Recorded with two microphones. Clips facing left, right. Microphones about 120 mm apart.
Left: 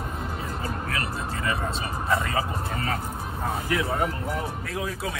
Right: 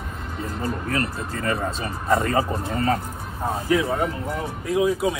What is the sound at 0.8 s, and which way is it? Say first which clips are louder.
Speech: right 4 dB; 40° right (ahead or behind).